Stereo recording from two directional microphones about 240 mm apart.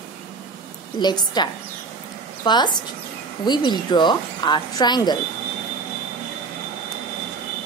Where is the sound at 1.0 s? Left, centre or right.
Centre.